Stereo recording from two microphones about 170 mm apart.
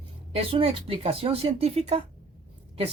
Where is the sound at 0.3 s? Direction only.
35° right (ahead or behind).